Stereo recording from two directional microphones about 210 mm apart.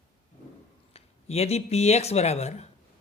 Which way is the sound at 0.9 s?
30° left (ahead or behind).